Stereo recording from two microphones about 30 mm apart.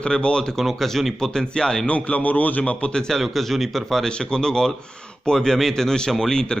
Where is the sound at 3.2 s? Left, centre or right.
Centre.